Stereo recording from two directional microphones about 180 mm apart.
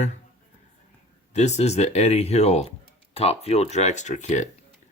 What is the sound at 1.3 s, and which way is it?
Speech, 40° left (ahead or behind).